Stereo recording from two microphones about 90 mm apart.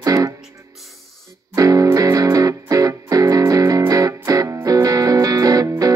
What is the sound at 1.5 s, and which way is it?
Music, 40° right (ahead or behind).